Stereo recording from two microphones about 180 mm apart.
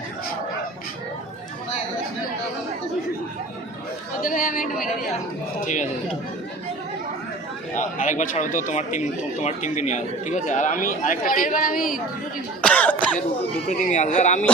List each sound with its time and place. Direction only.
4.2 s speech: 50° left (ahead or behind)
7.8 s speech: 45° left (ahead or behind)
12.6 s cough: 10° left (ahead or behind)
13.7 s speech: 40° left (ahead or behind)